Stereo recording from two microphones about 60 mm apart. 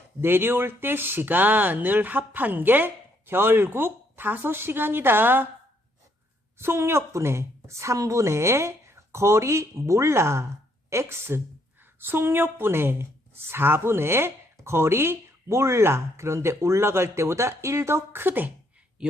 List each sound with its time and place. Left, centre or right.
0.2 s speech: right
6.6 s speech: right
11.9 s speech: right